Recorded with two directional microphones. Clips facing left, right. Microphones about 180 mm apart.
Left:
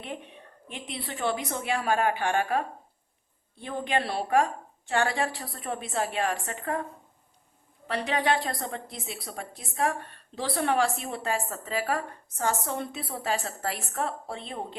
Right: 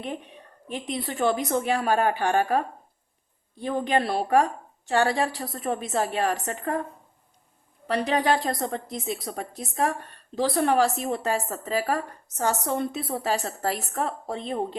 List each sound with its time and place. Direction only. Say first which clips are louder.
0.7 s a woman's voice: right 7 dB; 40° right (ahead or behind)
7.9 s a woman's voice: right 4 dB; 40° right (ahead or behind)